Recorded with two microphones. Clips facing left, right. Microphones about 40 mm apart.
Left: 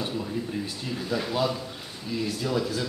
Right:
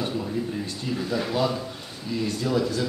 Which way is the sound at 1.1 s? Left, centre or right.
Centre.